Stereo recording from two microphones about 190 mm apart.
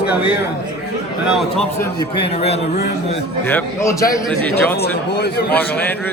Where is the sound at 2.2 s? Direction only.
35° left (ahead or behind).